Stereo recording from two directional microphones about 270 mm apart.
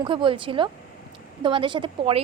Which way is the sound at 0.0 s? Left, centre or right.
Centre.